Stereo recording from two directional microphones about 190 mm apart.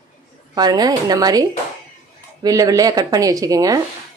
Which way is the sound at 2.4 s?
20° right (ahead or behind).